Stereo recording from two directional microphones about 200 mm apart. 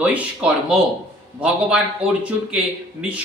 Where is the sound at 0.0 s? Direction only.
5° right (ahead or behind).